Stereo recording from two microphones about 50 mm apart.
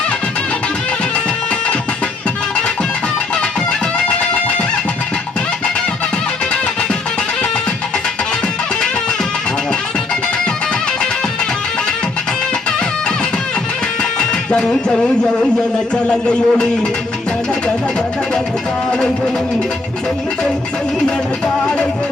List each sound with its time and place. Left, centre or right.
3.7 s music: centre
14.2 s music: centre
16.0 s a man's voice: centre